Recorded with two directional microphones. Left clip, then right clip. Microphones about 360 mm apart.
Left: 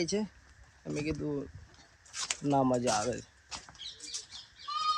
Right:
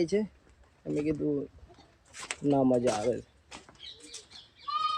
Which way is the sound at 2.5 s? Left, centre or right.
Left.